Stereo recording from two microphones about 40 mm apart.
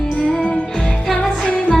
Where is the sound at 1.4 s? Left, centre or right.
Left.